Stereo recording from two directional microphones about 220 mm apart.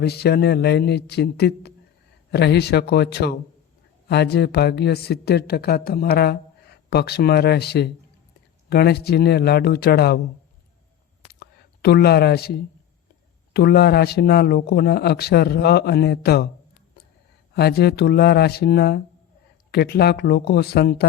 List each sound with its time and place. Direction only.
0.0 s a woman's voice: 50° left (ahead or behind)
11.3 s whispering: 45° left (ahead or behind)
13.5 s a woman's voice: 45° left (ahead or behind)
17.5 s a woman's voice: 45° left (ahead or behind)